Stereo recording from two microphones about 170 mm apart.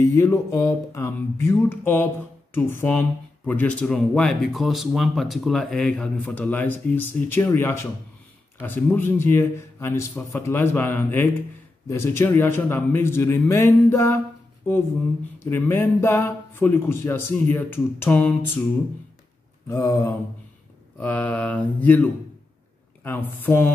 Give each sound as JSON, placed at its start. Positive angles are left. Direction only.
{"t": 0.0, "sound": "speech", "side_deg": 15}
{"t": 15.5, "sound": "speech", "side_deg": 15}
{"t": 19.7, "sound": "speech", "side_deg": 20}